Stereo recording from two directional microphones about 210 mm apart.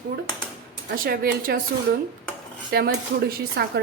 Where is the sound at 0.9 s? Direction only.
45° right (ahead or behind).